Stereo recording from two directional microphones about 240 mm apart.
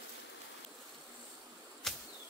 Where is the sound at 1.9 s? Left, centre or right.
Centre.